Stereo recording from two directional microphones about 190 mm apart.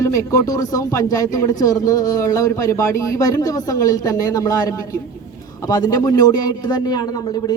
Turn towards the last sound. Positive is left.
turn(degrees=20)  # may be behind; listen again after turning